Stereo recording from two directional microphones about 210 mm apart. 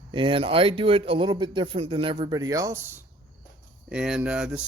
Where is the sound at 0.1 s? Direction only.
25° right (ahead or behind).